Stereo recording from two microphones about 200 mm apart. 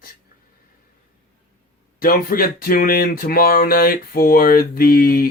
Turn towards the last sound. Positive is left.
turn(degrees=45)  # may be behind; listen again after turning